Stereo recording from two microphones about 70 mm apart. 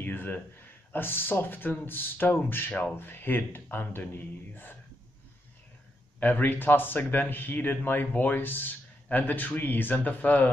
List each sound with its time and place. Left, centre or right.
0.0 s a sound: left
0.9 s speech: left
6.1 s speech: left